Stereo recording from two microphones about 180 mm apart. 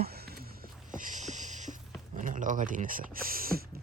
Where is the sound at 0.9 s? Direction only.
45° right (ahead or behind).